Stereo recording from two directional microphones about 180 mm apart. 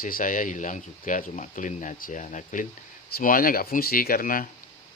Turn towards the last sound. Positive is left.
turn(degrees=50)  # may be behind; listen again after turning